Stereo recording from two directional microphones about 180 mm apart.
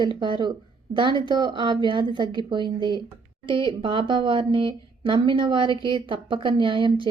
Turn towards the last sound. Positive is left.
turn(degrees=-30)  # may be behind; listen again after turning